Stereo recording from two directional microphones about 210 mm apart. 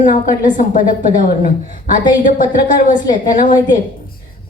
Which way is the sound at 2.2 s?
40° left (ahead or behind).